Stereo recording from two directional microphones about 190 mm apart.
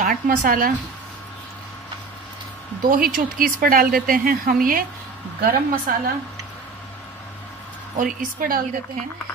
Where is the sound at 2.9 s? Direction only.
50° right (ahead or behind).